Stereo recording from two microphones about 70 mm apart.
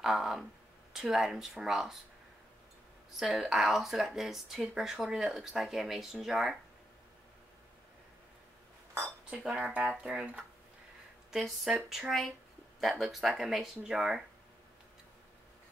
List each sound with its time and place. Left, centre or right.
0.0 s speech: centre
3.2 s speech: centre
8.9 s dishes: right
9.4 s speech: centre
11.3 s speech: centre